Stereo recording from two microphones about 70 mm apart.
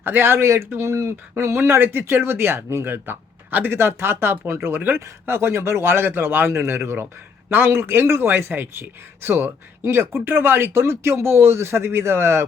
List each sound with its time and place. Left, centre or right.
0.0 s speech: right